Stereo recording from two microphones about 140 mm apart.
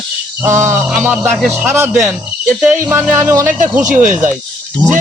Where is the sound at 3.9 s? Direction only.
65° right (ahead or behind).